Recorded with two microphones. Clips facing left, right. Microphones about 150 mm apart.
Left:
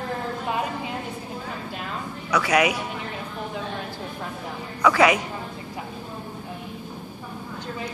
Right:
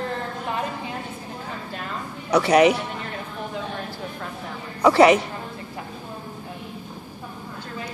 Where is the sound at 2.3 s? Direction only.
30° right (ahead or behind).